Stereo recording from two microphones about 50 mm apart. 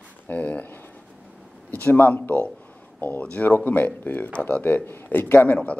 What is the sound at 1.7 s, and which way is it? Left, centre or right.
Speech, left.